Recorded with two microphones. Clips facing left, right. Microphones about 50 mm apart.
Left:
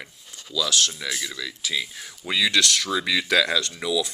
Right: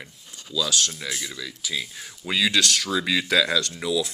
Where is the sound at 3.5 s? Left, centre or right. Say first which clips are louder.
Even; left.